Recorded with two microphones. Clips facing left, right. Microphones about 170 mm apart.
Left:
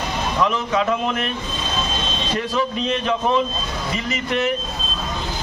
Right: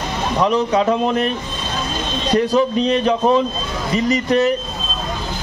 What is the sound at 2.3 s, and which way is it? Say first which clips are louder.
A man's voice: right 8 dB; 40° right (ahead or behind).